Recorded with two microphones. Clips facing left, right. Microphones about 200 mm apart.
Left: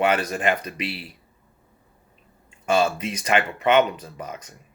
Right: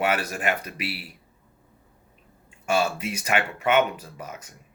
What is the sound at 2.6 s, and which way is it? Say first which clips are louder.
Speech: left 3 dB; 10° right (ahead or behind).